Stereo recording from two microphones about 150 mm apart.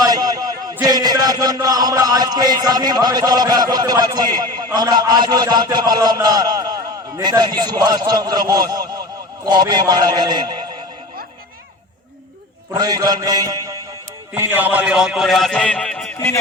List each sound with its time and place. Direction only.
0.0 s a man's voice: 25° right (ahead or behind)
12.7 s a man's voice: 25° right (ahead or behind); by 16.1 s 5° left (ahead or behind)
16.1 s speech: 20° left (ahead or behind)